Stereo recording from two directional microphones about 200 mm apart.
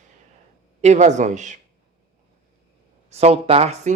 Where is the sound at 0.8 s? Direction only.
35° right (ahead or behind).